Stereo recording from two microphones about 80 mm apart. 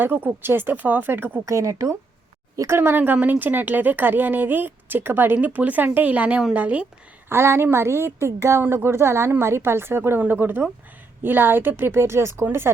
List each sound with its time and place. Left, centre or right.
0.0 s a woman's voice: right
1.5 s a woman's voice: right; by 6.8 s centre
7.3 s a woman's voice: right